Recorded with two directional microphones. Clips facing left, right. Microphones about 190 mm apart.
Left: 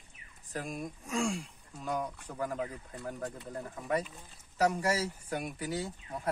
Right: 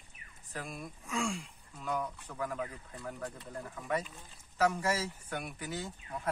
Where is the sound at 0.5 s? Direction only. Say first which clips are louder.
Left 4 dB; 40° left (ahead or behind); by 3.1 s 25° left (ahead or behind).